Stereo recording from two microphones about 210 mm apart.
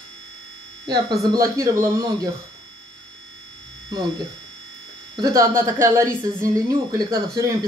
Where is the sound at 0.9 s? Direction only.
15° right (ahead or behind).